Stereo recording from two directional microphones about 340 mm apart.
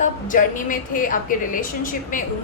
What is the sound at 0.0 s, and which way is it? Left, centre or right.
A woman's voice, left.